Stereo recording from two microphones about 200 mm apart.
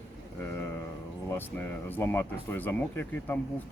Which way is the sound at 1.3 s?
10° left (ahead or behind).